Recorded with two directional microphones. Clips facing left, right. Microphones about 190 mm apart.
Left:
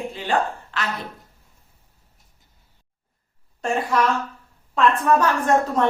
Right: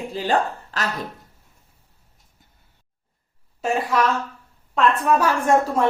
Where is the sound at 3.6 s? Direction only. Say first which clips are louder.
Even; centre (ahead or behind).